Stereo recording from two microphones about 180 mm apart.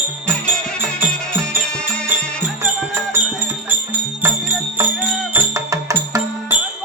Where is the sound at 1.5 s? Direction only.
10° right (ahead or behind).